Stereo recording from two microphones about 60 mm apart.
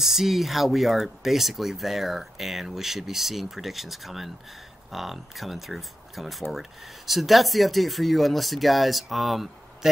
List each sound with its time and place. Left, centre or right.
0.0 s speech: centre